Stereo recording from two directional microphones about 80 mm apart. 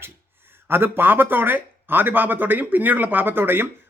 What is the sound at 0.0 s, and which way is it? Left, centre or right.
A man's voice, right.